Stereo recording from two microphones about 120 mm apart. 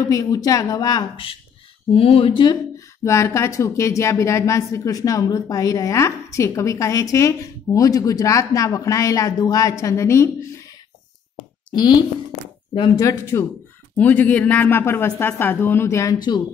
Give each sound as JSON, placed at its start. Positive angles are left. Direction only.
{"t": 0.1, "sound": "speech", "side_deg": 30}
{"t": 1.1, "sound": "speech", "side_deg": 50}
{"t": 3.0, "sound": "speech", "side_deg": 25}
{"t": 11.7, "sound": "speech", "side_deg": 35}
{"t": 12.9, "sound": "speech", "side_deg": 25}